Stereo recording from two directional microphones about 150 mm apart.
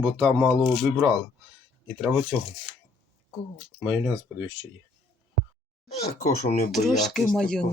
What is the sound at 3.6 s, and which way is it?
Speech, centre (ahead or behind).